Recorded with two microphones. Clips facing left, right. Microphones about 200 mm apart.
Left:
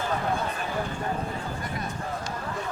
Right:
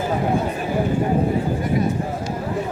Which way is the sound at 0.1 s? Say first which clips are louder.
Right 7 dB; 10° right (ahead or behind).